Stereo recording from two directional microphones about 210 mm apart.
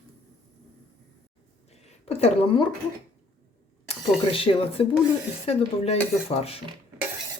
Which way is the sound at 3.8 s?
25° left (ahead or behind).